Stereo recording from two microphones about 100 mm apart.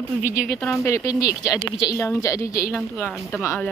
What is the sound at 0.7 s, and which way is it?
Speech, 30° left (ahead or behind).